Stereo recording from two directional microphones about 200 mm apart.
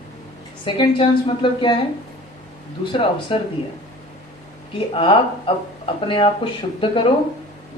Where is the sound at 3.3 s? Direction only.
30° left (ahead or behind).